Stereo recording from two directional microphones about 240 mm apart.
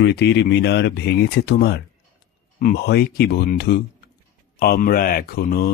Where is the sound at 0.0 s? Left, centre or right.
Left.